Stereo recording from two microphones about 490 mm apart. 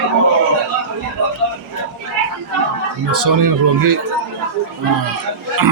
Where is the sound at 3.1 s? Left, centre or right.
Right.